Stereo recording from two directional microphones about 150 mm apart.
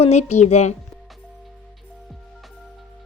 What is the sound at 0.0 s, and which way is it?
Speech, 45° left (ahead or behind).